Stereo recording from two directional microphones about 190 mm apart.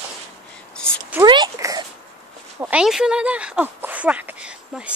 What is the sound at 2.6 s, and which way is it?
A woman's voice, 5° right (ahead or behind).